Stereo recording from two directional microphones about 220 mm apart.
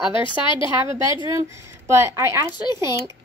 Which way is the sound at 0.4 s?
20° left (ahead or behind).